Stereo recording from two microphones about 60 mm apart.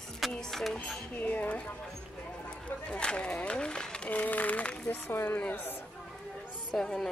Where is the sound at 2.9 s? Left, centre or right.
Centre.